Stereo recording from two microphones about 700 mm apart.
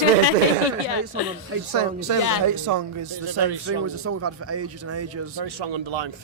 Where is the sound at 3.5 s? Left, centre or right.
Right.